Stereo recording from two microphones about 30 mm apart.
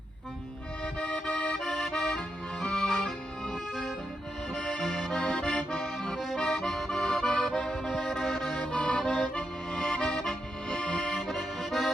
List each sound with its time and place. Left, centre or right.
0.9 s accordion: left
1.6 s accordion: centre
1.9 s accordion: left
2.7 s music: centre
4.5 s accordion: left
5.2 s accordion: left
5.8 s accordion: centre
6.4 s accordion: left
6.7 s accordion: centre
7.0 s accordion: left
7.9 s music: centre
8.3 s accordion: left
8.5 s accordion: left